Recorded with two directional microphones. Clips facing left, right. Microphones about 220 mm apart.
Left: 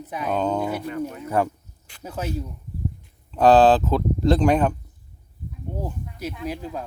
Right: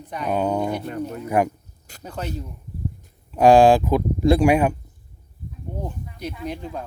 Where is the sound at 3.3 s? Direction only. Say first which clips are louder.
Right 2 dB; 10° right (ahead or behind).